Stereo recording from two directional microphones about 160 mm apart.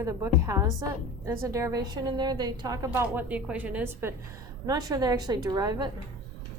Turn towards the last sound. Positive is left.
turn(degrees=-25)  # may be behind; listen again after turning